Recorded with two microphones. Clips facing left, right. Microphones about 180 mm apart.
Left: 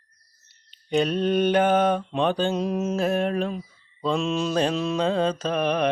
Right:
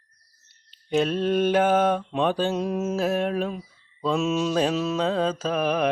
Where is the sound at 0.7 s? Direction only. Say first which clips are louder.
Even; centre (ahead or behind).